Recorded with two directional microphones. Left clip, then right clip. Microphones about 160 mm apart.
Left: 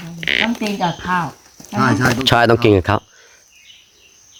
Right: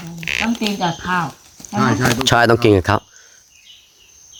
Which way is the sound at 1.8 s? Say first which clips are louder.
Left 1 dB; 50° left (ahead or behind).